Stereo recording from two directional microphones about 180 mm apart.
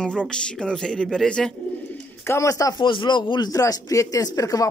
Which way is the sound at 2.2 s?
15° left (ahead or behind).